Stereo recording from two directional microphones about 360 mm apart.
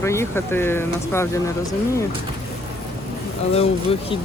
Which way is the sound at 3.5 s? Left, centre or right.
Centre.